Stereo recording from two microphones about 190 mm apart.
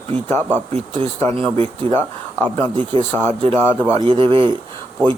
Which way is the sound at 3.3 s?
30° right (ahead or behind).